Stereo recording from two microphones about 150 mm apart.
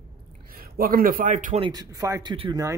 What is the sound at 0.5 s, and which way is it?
A man's voice, 80° right.